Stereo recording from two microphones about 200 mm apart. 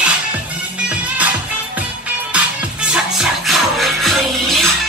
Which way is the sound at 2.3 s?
5° right (ahead or behind).